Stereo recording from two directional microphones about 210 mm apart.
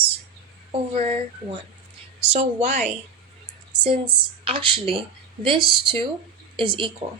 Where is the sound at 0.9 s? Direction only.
30° right (ahead or behind).